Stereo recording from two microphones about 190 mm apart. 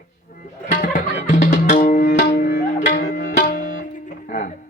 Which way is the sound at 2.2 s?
45° left (ahead or behind).